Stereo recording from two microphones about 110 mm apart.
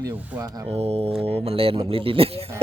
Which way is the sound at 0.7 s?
65° right (ahead or behind).